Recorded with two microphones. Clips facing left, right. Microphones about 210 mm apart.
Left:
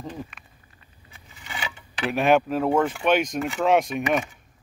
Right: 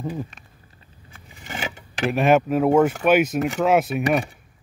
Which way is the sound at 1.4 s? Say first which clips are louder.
Right 4 dB; 45° right (ahead or behind).